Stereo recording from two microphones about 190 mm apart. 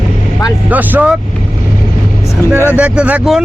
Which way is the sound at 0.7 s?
10° right (ahead or behind).